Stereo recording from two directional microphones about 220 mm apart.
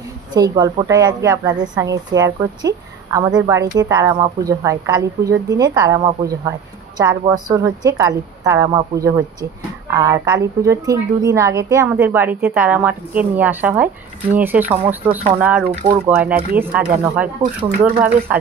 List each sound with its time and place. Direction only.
0.3 s speech: 20° right (ahead or behind)